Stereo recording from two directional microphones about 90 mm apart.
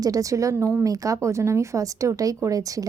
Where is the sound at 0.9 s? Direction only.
40° right (ahead or behind).